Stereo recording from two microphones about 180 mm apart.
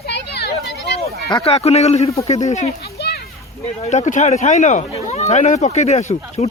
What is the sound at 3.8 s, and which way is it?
Speech, 40° left (ahead or behind).